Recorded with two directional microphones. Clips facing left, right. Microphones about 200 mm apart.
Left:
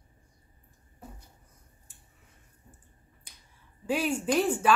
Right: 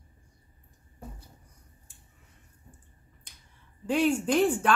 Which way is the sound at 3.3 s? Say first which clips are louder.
Even; 10° left (ahead or behind).